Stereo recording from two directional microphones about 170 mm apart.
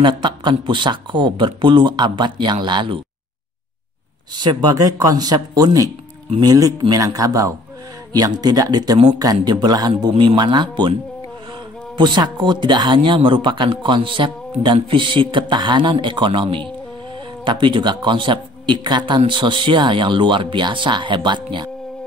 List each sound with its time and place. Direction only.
0.0 s a man's voice: 25° right (ahead or behind)
4.4 s a man's voice: 25° right (ahead or behind)
12.0 s a man's voice: 25° right (ahead or behind)